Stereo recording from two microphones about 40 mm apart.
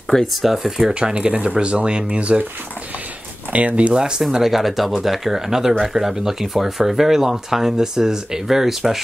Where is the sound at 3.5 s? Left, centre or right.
Right.